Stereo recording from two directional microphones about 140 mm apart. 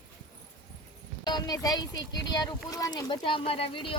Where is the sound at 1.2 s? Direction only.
30° left (ahead or behind).